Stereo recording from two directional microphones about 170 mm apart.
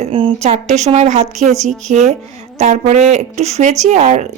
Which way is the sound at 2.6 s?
45° right (ahead or behind).